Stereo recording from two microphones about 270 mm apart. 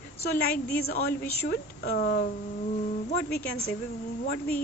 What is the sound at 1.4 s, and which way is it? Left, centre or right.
Speech, left.